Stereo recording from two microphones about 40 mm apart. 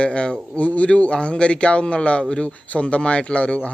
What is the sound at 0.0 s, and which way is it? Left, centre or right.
A man's voice, left.